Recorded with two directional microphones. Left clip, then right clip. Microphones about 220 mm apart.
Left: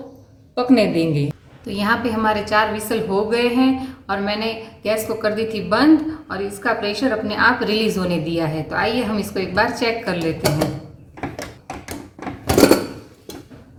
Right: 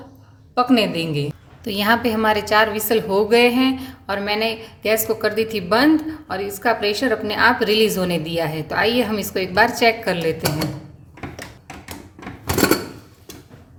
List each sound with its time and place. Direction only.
0.5 s a woman's voice: 45° right (ahead or behind)